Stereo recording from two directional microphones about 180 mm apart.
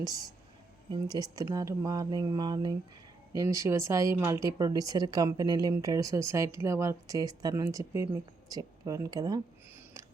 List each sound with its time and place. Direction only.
0.0 s speech: 20° right (ahead or behind)